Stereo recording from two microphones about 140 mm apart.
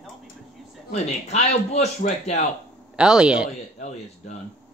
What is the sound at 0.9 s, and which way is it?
Speech, 50° left (ahead or behind).